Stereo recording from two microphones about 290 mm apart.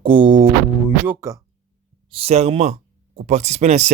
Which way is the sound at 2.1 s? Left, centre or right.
Right.